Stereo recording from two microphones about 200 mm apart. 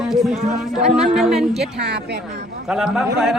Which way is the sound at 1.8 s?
55° right (ahead or behind).